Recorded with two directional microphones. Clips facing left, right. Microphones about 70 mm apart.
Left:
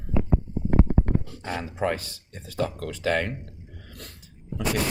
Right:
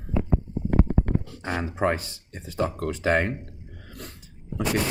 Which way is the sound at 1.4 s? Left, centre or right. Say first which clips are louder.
Right 5 dB; right.